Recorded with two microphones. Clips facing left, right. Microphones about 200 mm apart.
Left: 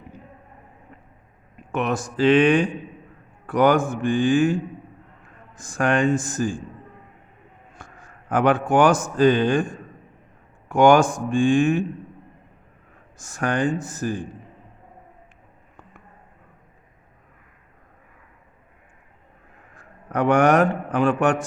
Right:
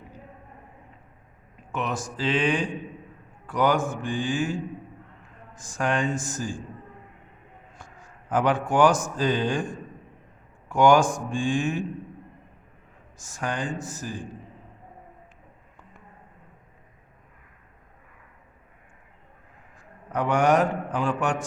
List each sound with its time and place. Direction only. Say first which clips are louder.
1.7 s speech: left 6 dB; 60° left (ahead or behind)
5.6 s speech: left 6 dB; 60° left (ahead or behind)
7.8 s a man's voice: left 5 dB; 60° left (ahead or behind)
10.7 s speech: left 3 dB; 60° left (ahead or behind)
13.1 s speech: left 7 dB; 60° left (ahead or behind)
19.7 s a man's voice: left 4 dB; 65° left (ahead or behind)